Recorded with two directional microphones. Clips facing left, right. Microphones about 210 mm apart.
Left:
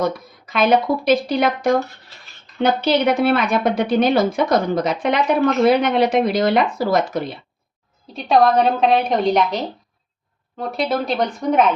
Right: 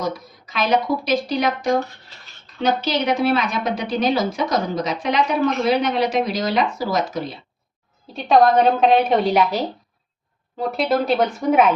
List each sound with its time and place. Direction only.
0.0 s a woman's voice: 55° left (ahead or behind)
8.1 s a woman's voice: centre (ahead or behind)